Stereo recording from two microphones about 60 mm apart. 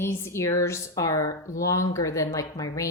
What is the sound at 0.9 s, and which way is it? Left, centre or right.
Speech, left.